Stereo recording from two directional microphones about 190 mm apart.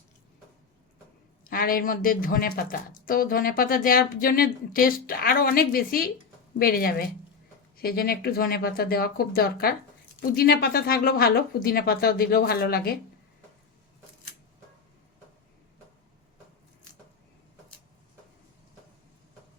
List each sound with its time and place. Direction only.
1.5 s speech: 50° left (ahead or behind)